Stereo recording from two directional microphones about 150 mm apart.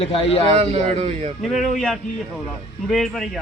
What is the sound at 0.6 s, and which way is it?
Speech, 45° right (ahead or behind).